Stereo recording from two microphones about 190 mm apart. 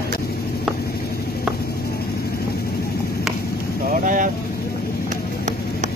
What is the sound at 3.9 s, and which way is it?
Vehicle, 45° right (ahead or behind).